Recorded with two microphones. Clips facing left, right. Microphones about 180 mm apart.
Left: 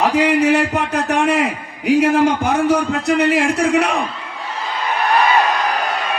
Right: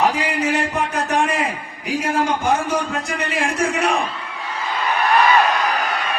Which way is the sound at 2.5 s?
70° left (ahead or behind).